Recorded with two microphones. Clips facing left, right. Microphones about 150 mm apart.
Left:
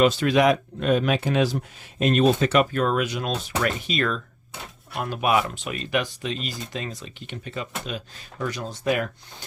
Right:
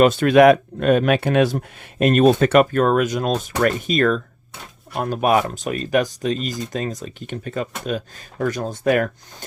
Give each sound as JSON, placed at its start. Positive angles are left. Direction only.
{"t": 0.0, "sound": "speech", "side_deg": -50}